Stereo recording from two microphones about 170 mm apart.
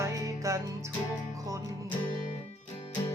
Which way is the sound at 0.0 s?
20° right (ahead or behind).